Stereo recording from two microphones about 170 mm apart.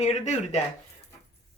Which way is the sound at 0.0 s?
40° left (ahead or behind).